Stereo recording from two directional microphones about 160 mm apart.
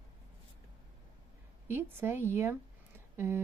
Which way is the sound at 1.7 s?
15° right (ahead or behind).